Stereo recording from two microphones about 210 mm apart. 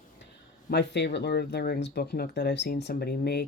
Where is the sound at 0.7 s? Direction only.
55° left (ahead or behind).